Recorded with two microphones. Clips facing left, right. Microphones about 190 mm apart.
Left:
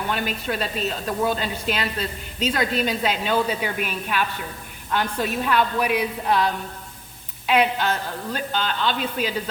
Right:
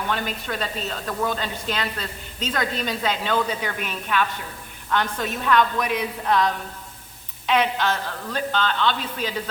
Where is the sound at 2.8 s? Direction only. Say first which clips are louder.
Left 2 dB; 10° left (ahead or behind).